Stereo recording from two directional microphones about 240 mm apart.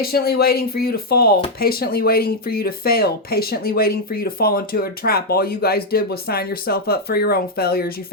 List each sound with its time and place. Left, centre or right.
0.0 s speech: left